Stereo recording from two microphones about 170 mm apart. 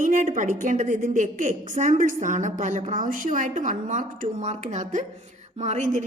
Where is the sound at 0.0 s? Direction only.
50° right (ahead or behind).